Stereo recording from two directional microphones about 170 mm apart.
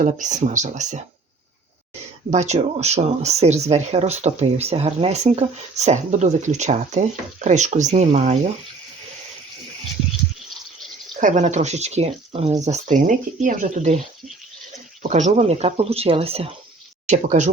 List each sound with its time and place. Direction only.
0.0 s speech: 45° right (ahead or behind)
2.3 s speech: 40° right (ahead or behind)
11.2 s speech: 45° right (ahead or behind)
12.6 s speech: 45° right (ahead or behind)
15.0 s speech: 45° right (ahead or behind)
17.1 s speech: 45° right (ahead or behind)